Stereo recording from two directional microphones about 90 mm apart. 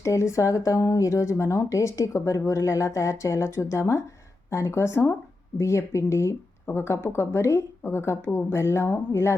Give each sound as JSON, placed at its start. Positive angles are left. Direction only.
{"t": 0.0, "sound": "speech", "side_deg": 35}